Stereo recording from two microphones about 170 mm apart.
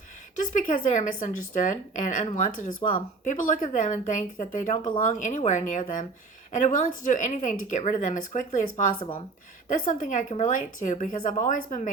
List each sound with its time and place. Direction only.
0.3 s speech: 50° left (ahead or behind)
9.6 s speech: 50° left (ahead or behind)